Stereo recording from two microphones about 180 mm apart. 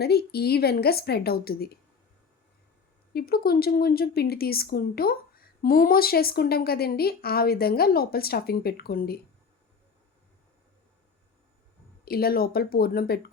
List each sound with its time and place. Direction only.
0.0 s a woman's voice: 60° left (ahead or behind)
3.1 s a woman's voice: 60° left (ahead or behind)
12.0 s a woman's voice: 55° left (ahead or behind)